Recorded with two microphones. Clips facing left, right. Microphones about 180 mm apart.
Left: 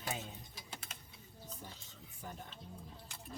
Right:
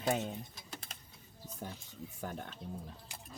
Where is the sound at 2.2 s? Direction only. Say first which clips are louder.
Right 6 dB; 75° right (ahead or behind).